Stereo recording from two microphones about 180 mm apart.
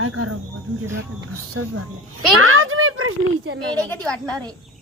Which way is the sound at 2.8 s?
90° right.